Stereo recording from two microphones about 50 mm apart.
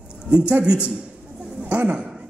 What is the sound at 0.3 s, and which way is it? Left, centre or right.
A man's voice, right.